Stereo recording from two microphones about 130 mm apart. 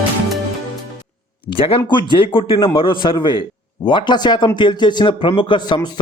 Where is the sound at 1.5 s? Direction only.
40° left (ahead or behind).